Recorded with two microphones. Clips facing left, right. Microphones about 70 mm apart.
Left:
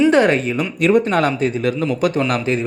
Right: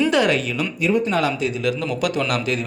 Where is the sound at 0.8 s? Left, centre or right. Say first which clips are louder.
Left 5 dB; left.